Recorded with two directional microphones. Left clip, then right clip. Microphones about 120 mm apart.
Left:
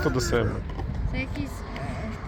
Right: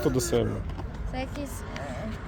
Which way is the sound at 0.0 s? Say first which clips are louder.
Left 1 dB; 40° right (ahead or behind).